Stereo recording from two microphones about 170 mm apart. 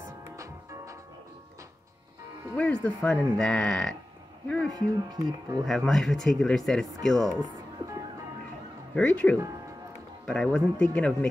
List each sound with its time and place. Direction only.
2.5 s speech: 5° left (ahead or behind)
4.6 s speech: 20° right (ahead or behind)
5.7 s speech: centre (ahead or behind)
8.9 s speech: 5° left (ahead or behind)